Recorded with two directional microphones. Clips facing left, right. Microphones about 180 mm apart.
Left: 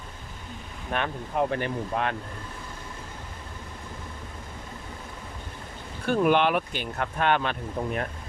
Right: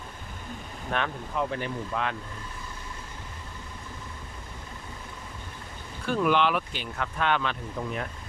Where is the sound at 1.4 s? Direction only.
60° left (ahead or behind).